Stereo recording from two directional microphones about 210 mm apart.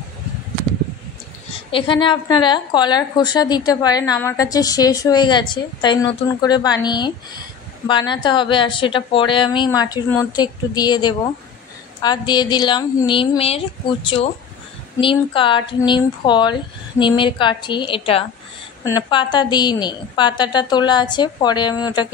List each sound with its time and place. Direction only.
1.7 s a woman's voice: 25° left (ahead or behind)